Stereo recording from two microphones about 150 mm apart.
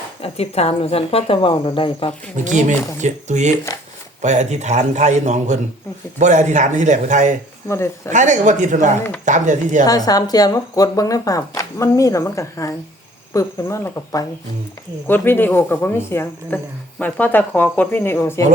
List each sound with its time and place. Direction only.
0.2 s speech: 45° left (ahead or behind)
2.3 s a man's voice: 55° right (ahead or behind)
7.7 s speech: 20° left (ahead or behind)
8.1 s speech: 55° right (ahead or behind)
9.8 s speech: 25° left (ahead or behind)